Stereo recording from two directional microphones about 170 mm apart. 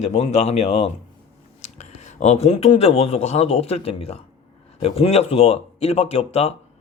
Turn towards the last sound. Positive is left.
turn(degrees=35)  # may be behind; listen again after turning